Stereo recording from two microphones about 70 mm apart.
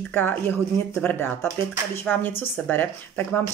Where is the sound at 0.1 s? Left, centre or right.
Left.